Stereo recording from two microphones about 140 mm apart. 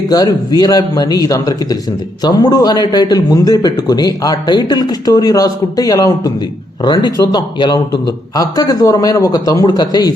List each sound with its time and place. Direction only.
0.1 s a man's voice: 25° left (ahead or behind)